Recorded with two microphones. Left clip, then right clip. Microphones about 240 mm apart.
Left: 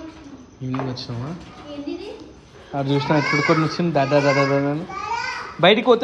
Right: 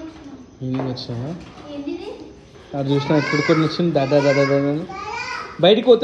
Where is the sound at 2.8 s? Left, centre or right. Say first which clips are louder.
Right 1 dB; centre.